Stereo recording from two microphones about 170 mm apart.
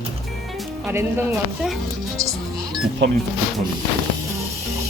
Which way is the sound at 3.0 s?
90° right.